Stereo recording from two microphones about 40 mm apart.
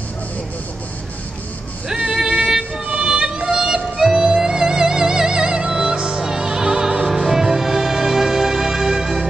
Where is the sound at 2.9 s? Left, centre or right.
Right.